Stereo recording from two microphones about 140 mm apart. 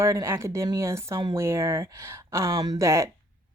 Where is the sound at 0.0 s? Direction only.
20° right (ahead or behind).